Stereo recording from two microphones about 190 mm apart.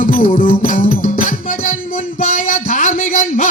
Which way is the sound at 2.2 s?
45° left (ahead or behind).